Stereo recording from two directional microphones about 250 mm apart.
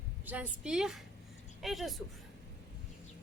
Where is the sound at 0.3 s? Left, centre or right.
Centre.